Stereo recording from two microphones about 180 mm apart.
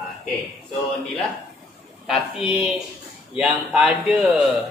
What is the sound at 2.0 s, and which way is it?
A man's voice, centre (ahead or behind).